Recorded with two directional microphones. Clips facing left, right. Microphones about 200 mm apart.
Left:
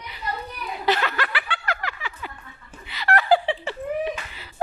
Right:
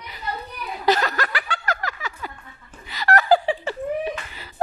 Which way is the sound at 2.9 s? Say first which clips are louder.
Right 2 dB; 45° right (ahead or behind).